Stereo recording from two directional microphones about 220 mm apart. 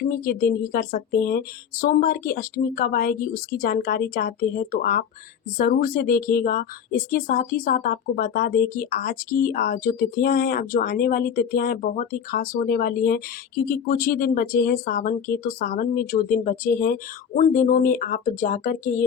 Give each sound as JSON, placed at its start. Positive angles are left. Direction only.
{"t": 0.0, "sound": "speech", "side_deg": 40}